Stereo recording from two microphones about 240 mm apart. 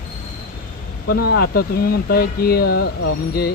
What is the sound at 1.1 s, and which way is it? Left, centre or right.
Speech, left.